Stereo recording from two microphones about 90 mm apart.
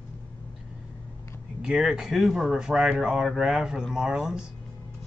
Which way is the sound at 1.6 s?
10° right (ahead or behind).